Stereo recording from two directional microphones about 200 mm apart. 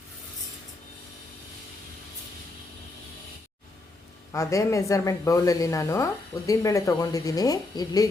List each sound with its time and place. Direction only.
4.3 s a woman's voice: 15° left (ahead or behind)